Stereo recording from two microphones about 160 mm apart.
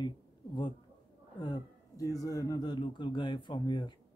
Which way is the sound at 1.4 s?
25° left (ahead or behind).